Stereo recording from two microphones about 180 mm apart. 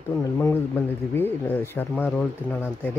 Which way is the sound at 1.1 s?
10° left (ahead or behind).